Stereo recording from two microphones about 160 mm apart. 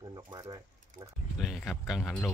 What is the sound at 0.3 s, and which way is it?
Speech, 25° right (ahead or behind).